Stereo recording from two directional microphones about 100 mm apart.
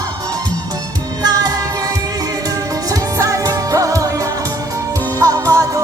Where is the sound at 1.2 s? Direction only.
40° right (ahead or behind).